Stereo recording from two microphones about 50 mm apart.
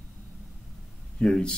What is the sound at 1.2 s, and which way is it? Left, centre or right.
Speech, centre.